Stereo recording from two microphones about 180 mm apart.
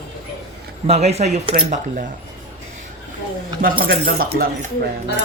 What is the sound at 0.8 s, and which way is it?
Speech, 35° right (ahead or behind).